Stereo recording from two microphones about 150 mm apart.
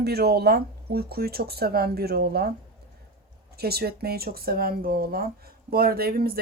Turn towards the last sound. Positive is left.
turn(degrees=-90)